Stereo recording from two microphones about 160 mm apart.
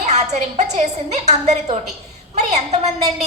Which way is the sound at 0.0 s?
45° right (ahead or behind).